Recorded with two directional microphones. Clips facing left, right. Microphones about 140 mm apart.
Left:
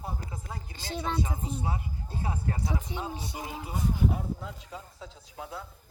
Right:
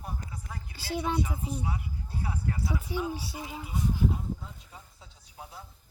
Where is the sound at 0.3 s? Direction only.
25° left (ahead or behind).